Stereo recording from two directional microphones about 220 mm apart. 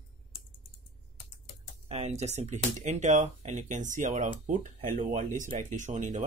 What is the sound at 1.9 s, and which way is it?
Speech, 30° right (ahead or behind).